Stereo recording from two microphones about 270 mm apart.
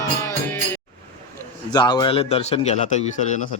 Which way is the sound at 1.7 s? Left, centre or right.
Centre.